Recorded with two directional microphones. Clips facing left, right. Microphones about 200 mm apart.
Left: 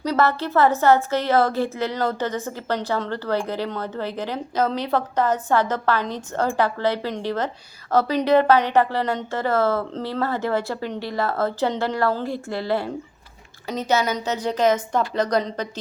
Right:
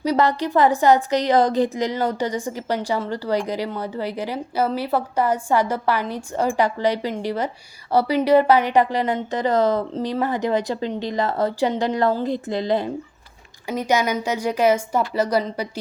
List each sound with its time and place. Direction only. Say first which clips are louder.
0.0 s a woman's voice: right 2 dB; 15° right (ahead or behind)